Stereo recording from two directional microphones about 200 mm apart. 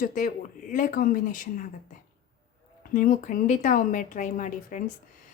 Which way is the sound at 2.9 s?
45° left (ahead or behind).